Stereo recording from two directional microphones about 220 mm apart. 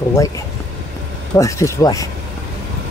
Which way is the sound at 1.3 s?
15° left (ahead or behind).